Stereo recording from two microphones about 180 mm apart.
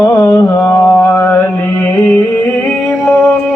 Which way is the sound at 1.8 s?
5° left (ahead or behind).